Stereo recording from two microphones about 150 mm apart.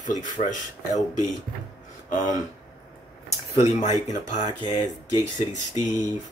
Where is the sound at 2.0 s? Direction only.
55° left (ahead or behind).